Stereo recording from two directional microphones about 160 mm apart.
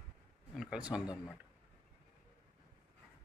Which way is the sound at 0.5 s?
5° right (ahead or behind).